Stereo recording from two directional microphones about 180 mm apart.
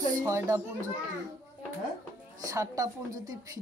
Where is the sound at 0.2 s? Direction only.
15° right (ahead or behind).